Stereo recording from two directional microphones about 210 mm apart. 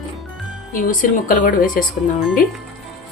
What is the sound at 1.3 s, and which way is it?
Speech, 40° left (ahead or behind).